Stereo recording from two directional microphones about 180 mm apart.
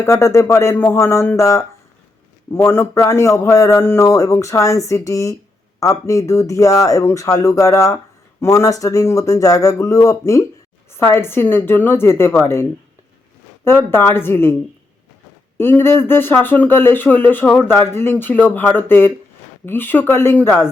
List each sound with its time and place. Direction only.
0.0 s speech: 15° left (ahead or behind)
13.7 s speech: 10° left (ahead or behind)
15.5 s speech: 15° left (ahead or behind)